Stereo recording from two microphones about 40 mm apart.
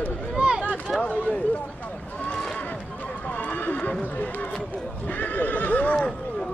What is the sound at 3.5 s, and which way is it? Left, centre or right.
Neigh, left.